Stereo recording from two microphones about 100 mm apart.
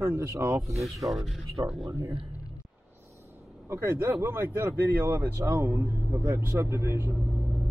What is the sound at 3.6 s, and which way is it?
Speech, 25° right (ahead or behind).